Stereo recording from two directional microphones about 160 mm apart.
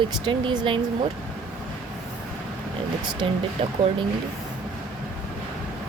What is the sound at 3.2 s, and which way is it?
Speech, 30° right (ahead or behind).